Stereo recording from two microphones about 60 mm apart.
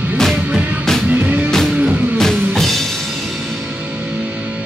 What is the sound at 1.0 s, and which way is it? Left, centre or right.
Music, right.